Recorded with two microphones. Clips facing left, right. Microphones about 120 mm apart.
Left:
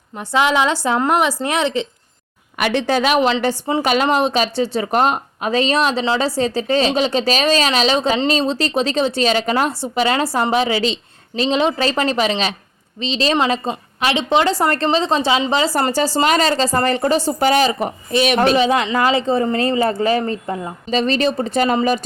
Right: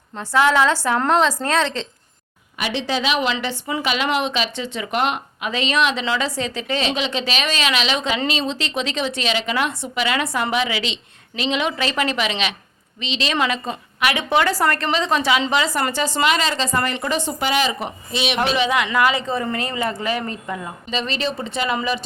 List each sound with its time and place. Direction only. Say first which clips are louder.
0.2 s a woman's voice: even; 15° left (ahead or behind)
2.6 s speech: left 6 dB; 55° left (ahead or behind)
3.4 s a woman's voice: left 6 dB; 35° left (ahead or behind)
20.9 s a woman's voice: left 7 dB; 40° left (ahead or behind)